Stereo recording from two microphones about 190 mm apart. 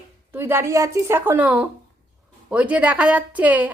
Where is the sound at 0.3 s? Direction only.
10° right (ahead or behind).